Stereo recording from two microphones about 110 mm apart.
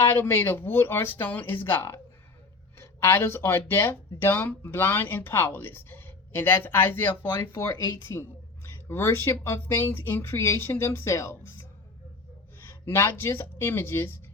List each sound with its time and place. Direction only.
0.0 s speech: 20° left (ahead or behind)
12.6 s speech: 20° left (ahead or behind)